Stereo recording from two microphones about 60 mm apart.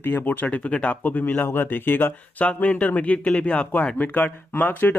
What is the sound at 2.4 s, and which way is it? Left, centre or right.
Speech, left.